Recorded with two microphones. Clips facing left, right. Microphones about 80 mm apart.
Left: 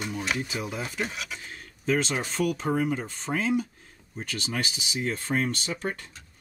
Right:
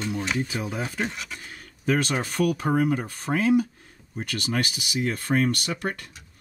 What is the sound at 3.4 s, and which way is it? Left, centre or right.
Speech, centre.